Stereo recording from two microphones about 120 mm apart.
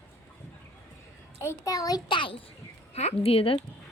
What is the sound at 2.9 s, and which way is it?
Speech, 60° left (ahead or behind).